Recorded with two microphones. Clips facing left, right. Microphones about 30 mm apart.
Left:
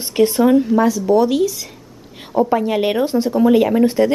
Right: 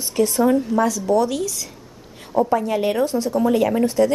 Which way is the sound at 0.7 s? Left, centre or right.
Centre.